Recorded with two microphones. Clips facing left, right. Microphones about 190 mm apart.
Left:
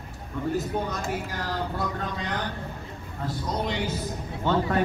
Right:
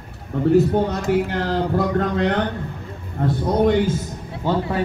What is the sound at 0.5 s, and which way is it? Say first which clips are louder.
Speech: right 13 dB; 65° right (ahead or behind).